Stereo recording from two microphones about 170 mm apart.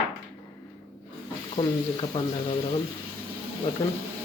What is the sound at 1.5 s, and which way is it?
Speech, 30° left (ahead or behind).